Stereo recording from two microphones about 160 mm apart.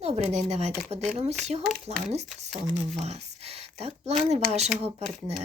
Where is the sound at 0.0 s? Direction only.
45° right (ahead or behind).